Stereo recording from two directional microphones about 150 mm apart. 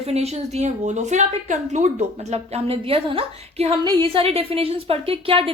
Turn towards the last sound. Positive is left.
turn(degrees=-40)  # may be behind; listen again after turning